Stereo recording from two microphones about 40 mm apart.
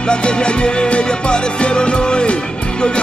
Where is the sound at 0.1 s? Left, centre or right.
Left.